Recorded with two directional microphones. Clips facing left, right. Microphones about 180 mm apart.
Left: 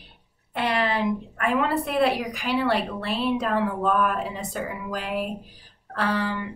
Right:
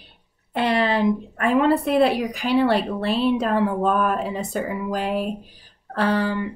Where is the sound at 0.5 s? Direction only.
30° right (ahead or behind).